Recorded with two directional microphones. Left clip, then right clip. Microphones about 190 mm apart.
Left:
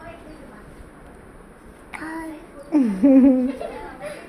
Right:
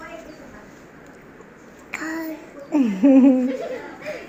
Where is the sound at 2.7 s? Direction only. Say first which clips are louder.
Even; 10° left (ahead or behind).